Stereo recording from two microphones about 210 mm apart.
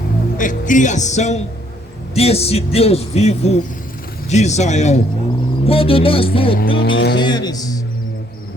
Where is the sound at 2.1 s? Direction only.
30° left (ahead or behind).